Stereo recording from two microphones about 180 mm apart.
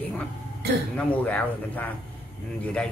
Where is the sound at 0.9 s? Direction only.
10° left (ahead or behind).